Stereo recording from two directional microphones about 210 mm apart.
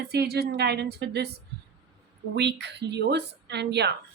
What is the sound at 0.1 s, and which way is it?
Speech, 50° right (ahead or behind).